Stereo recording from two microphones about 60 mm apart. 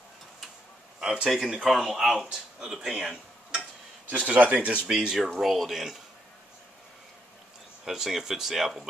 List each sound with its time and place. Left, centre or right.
1.0 s speech: centre
4.1 s speech: right
4.8 s speech: centre
7.8 s speech: centre